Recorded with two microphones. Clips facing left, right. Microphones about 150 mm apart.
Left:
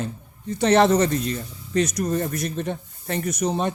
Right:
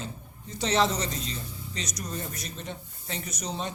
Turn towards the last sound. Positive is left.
turn(degrees=55)  # may be behind; listen again after turning